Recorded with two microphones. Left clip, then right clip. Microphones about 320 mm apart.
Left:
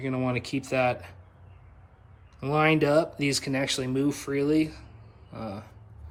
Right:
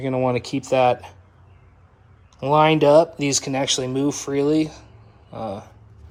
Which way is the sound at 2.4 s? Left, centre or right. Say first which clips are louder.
Right 7 dB; centre.